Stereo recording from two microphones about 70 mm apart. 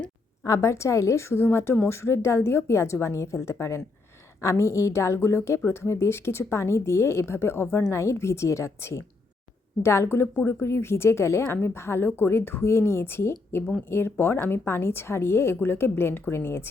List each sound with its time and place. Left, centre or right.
0.4 s a woman's voice: left